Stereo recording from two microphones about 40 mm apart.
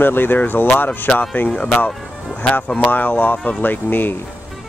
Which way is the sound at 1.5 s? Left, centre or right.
Left.